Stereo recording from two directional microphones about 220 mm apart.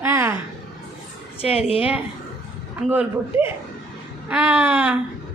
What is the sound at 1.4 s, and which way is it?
Speech, 25° left (ahead or behind).